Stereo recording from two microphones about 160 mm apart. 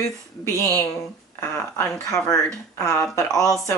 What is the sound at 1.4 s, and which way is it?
Speech, 20° left (ahead or behind).